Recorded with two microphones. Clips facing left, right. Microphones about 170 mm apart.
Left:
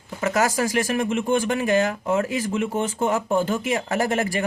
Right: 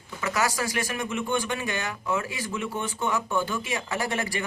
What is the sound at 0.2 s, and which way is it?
Speech, 45° left (ahead or behind).